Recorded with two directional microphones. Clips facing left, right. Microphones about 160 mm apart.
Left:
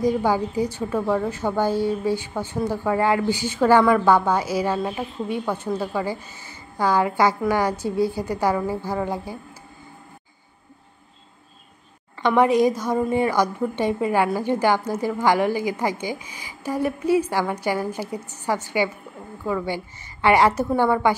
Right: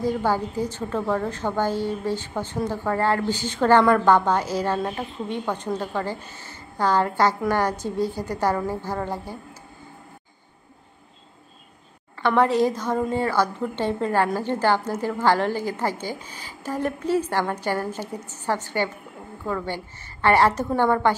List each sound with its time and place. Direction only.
0.0 s a woman's voice: 15° left (ahead or behind)
12.2 s a woman's voice: 15° left (ahead or behind)